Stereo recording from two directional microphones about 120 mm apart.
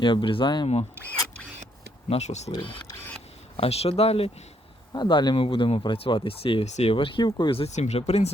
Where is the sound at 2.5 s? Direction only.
45° left (ahead or behind).